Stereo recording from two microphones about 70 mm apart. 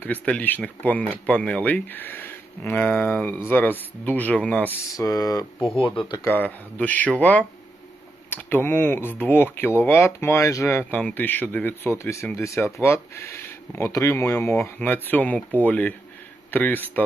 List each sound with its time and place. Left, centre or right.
0.0 s speech: left
4.9 s speech: left
6.2 s speech: left
10.9 s speech: left
14.8 s speech: left